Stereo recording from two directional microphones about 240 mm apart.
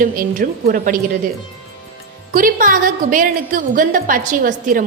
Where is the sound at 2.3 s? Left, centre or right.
Right.